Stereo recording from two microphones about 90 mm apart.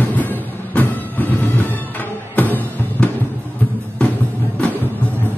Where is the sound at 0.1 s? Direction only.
20° left (ahead or behind).